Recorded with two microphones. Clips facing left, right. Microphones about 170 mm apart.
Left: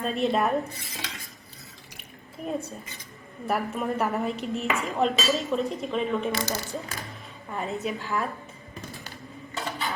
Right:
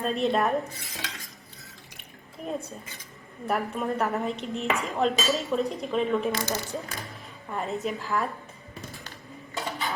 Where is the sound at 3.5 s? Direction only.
Centre (ahead or behind).